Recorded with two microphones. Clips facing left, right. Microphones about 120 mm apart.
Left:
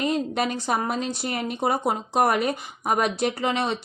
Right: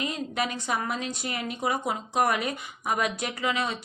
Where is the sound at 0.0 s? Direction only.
40° left (ahead or behind).